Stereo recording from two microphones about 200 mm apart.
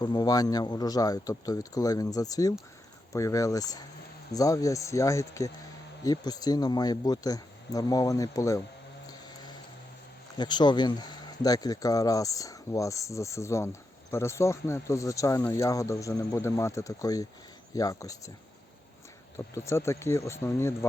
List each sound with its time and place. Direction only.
0.0 s speech: 20° left (ahead or behind)
10.3 s speech: 20° left (ahead or behind)
19.5 s speech: 15° left (ahead or behind)